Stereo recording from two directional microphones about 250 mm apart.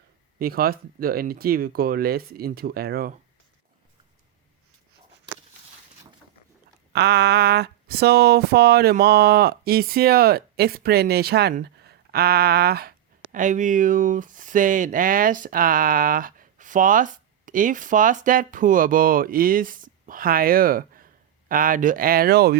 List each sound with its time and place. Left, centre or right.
0.3 s speech: right
6.9 s speech: right